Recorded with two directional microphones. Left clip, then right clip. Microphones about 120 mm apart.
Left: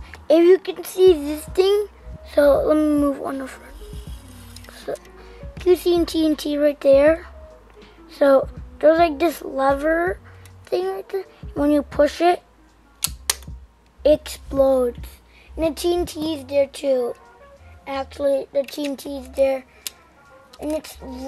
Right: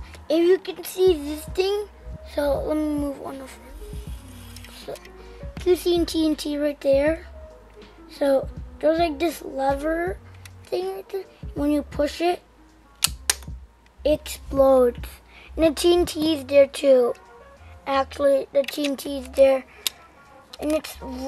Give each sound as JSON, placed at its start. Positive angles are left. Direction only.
{"t": 0.3, "sound": "a child's voice", "side_deg": 15}
{"t": 3.4, "sound": "music", "side_deg": 15}
{"t": 4.6, "sound": "a child's voice", "side_deg": 15}
{"t": 14.0, "sound": "a child's voice", "side_deg": 15}
{"t": 14.6, "sound": "speech", "side_deg": -15}